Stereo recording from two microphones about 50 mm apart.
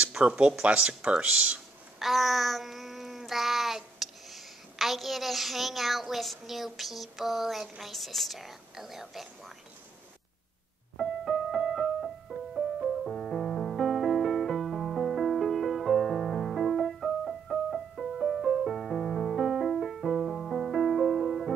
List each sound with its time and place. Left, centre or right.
0.1 s speech: centre
2.0 s child singing: centre
11.0 s music: centre